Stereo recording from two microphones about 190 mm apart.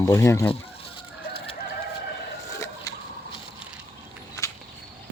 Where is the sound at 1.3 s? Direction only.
30° left (ahead or behind).